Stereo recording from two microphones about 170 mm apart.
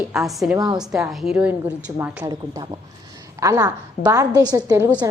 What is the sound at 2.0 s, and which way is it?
A woman's voice, 20° right (ahead or behind).